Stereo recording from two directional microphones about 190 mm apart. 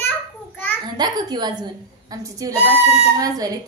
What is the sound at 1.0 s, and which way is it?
A woman's voice, 20° right (ahead or behind).